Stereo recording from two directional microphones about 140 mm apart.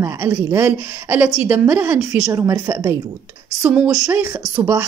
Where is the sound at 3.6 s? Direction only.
10° right (ahead or behind).